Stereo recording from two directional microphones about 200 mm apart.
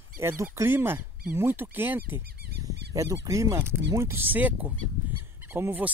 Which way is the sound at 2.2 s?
50° right (ahead or behind).